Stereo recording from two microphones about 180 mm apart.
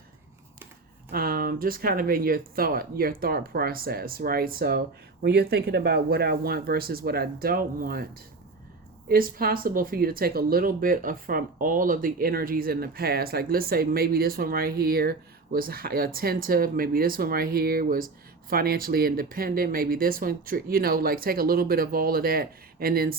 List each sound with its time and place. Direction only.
1.1 s speech: 55° right (ahead or behind)
9.0 s speech: 55° right (ahead or behind)